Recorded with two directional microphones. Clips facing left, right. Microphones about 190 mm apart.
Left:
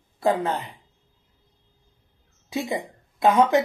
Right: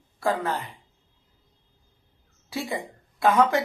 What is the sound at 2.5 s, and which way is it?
A woman's voice, 20° left (ahead or behind).